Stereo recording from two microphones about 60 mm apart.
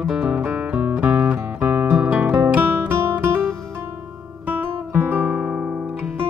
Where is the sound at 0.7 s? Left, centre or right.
Right.